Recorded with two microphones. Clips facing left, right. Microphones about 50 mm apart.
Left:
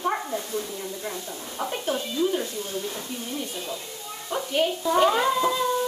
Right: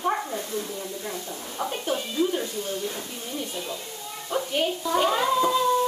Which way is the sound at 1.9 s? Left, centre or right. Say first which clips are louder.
Even; centre.